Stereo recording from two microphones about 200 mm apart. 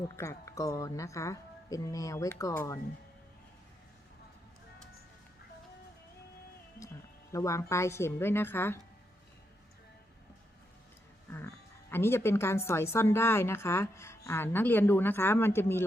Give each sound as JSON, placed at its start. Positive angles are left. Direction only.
{"t": 0.2, "sound": "a woman's voice", "side_deg": 15}
{"t": 7.3, "sound": "a woman's voice", "side_deg": 15}
{"t": 11.3, "sound": "a woman's voice", "side_deg": 10}